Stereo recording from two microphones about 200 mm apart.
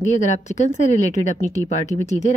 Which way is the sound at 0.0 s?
35° left (ahead or behind).